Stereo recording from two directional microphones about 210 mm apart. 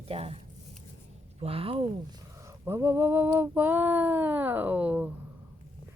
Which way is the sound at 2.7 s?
10° right (ahead or behind).